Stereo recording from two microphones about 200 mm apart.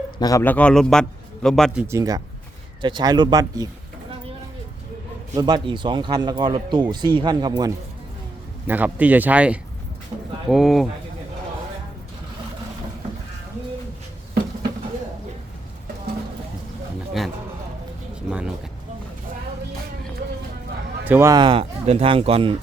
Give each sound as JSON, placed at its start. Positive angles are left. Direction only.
{"t": 0.2, "sound": "a man's voice", "side_deg": 15}
{"t": 1.9, "sound": "a man's voice", "side_deg": -15}
{"t": 5.3, "sound": "a man's voice", "side_deg": -20}
{"t": 8.6, "sound": "a man's voice", "side_deg": -10}
{"t": 18.3, "sound": "a sound", "side_deg": -5}
{"t": 21.0, "sound": "a man's voice", "side_deg": -10}